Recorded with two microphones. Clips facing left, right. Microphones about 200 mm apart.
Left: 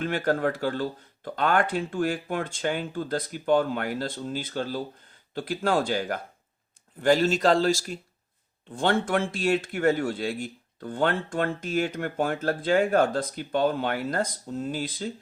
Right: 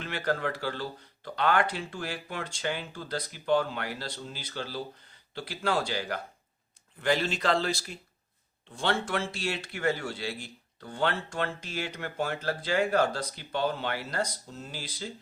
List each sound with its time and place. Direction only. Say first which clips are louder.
0.0 s speech: left 6 dB; 50° left (ahead or behind)